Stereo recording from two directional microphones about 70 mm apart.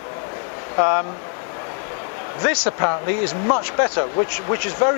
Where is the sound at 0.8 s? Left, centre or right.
Left.